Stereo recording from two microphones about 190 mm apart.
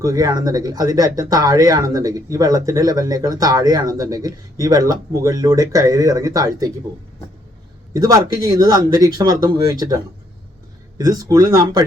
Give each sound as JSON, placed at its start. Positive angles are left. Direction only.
{"t": 0.0, "sound": "speech", "side_deg": -20}
{"t": 7.9, "sound": "speech", "side_deg": -20}